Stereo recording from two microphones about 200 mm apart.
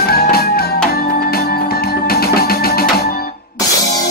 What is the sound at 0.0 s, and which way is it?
Music, 50° left (ahead or behind).